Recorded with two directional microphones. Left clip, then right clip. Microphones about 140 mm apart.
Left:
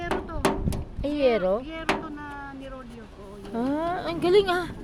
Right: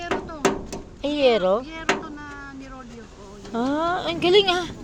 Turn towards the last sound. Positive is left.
turn(degrees=15)  # may be behind; listen again after turning